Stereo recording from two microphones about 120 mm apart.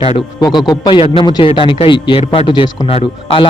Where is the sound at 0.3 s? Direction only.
35° left (ahead or behind).